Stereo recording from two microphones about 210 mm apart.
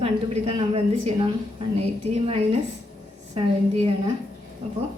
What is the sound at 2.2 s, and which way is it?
A woman's voice, 25° right (ahead or behind).